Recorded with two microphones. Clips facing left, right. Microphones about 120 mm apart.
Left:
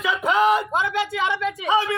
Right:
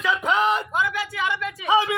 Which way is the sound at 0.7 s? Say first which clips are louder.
Left 3 dB; 25° left (ahead or behind).